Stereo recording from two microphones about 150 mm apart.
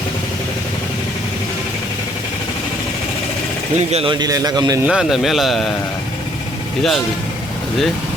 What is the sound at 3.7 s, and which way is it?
Speech, 45° right (ahead or behind).